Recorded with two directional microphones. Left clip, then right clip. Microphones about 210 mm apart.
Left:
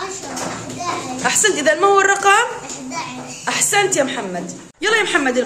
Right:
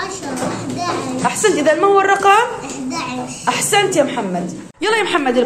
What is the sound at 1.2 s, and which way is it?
A woman's voice, centre (ahead or behind).